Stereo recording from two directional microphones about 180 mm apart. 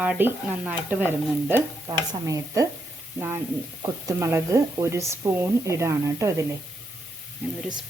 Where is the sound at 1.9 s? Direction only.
20° right (ahead or behind).